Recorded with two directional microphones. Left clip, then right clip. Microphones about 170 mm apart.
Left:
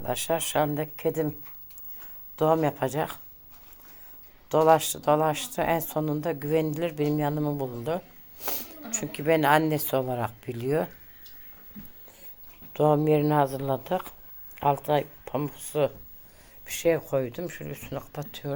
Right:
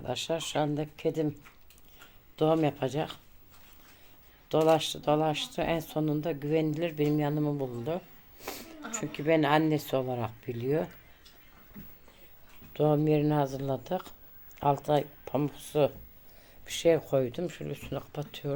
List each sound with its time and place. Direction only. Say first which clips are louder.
0.0 s a woman's voice: left 4 dB; centre (ahead or behind)
2.3 s a woman's voice: left 3 dB; 10° right (ahead or behind)
4.4 s a woman's voice: left 4 dB; 5° right (ahead or behind)
12.7 s speech: left 4 dB; 5° right (ahead or behind)